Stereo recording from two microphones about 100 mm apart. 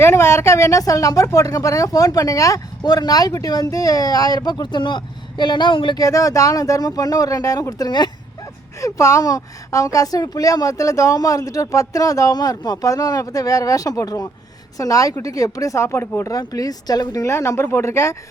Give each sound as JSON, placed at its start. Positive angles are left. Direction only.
{"t": 0.0, "sound": "speech", "side_deg": 25}
{"t": 6.0, "sound": "speech", "side_deg": 35}
{"t": 8.8, "sound": "speech", "side_deg": 30}